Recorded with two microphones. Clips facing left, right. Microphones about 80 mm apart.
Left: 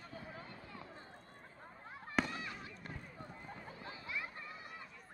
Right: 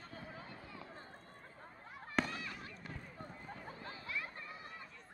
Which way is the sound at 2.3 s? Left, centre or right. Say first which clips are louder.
Even; left.